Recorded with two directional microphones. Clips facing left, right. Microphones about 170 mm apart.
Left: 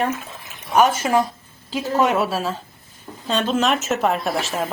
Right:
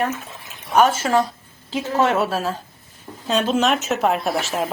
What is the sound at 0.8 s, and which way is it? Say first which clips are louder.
Speech: even; 15° left (ahead or behind).